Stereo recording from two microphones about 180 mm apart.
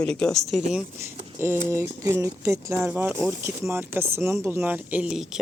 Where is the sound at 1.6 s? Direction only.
15° right (ahead or behind).